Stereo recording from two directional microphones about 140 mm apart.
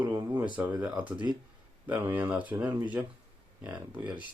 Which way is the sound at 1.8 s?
10° right (ahead or behind).